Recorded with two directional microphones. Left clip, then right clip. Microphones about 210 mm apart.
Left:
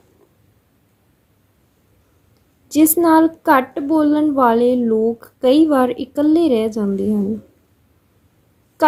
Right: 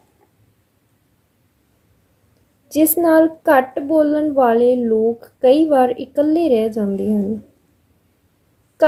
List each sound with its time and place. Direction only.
2.7 s a child's voice: 25° left (ahead or behind)